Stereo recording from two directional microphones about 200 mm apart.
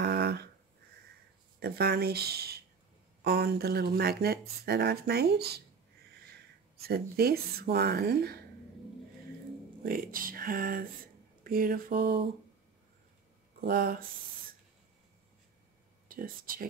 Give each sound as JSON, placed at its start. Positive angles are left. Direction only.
{"t": 0.0, "sound": "a sound", "side_deg": -55}
{"t": 1.6, "sound": "speech", "side_deg": -50}
{"t": 9.8, "sound": "speech", "side_deg": -45}
{"t": 13.6, "sound": "speech", "side_deg": -50}
{"t": 16.1, "sound": "speech", "side_deg": -45}